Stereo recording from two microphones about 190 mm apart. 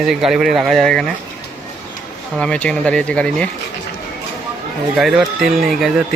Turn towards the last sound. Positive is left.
turn(degrees=0)  # may be behind; listen again after turning